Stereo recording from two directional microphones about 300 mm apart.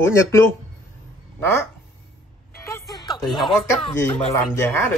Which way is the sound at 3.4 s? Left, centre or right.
Centre.